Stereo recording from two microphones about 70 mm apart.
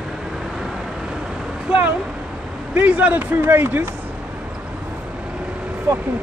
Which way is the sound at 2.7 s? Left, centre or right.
Right.